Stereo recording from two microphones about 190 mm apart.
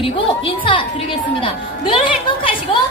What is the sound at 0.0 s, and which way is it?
Speech, 30° left (ahead or behind).